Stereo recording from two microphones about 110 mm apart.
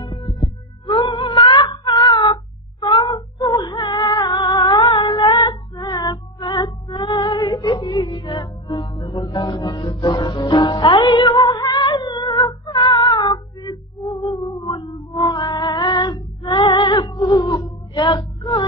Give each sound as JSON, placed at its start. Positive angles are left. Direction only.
{"t": 0.0, "sound": "heart sounds", "side_deg": 45}
{"t": 0.9, "sound": "music", "side_deg": 55}
{"t": 1.4, "sound": "a sound", "side_deg": 45}
{"t": 2.8, "sound": "female singing", "side_deg": 45}
{"t": 5.8, "sound": "music", "side_deg": 40}
{"t": 7.1, "sound": "female singing", "side_deg": 45}
{"t": 7.5, "sound": "music", "side_deg": 40}
{"t": 11.5, "sound": "female singing", "side_deg": 40}
{"t": 12.7, "sound": "cat", "side_deg": 45}
{"t": 14.2, "sound": "music", "side_deg": 35}
{"t": 17.3, "sound": "a sound", "side_deg": 40}